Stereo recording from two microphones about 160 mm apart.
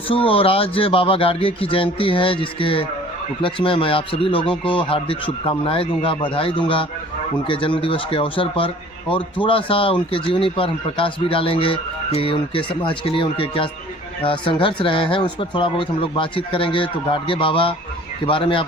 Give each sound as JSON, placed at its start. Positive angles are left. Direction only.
{"t": 0.1, "sound": "speech", "side_deg": 35}